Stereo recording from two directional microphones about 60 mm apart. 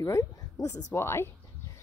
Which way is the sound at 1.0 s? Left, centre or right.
Left.